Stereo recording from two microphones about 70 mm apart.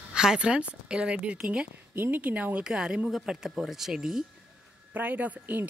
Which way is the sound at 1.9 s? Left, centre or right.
Right.